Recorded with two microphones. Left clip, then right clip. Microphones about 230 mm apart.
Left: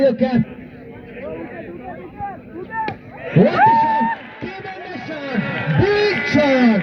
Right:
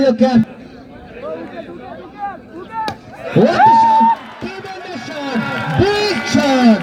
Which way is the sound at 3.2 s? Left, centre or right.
Right.